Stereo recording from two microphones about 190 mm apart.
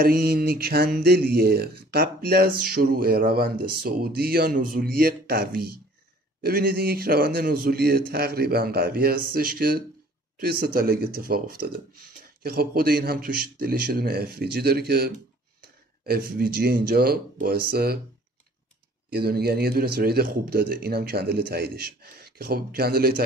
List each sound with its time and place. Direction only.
0.0 s speech: 50° right (ahead or behind)
19.0 s speech: 55° right (ahead or behind)